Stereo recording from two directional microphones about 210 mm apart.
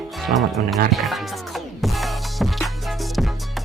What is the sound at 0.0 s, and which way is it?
Speech, centre (ahead or behind).